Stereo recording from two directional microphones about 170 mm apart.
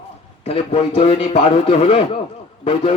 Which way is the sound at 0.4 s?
35° left (ahead or behind).